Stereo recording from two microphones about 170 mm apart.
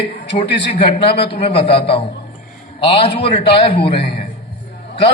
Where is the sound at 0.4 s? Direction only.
80° left.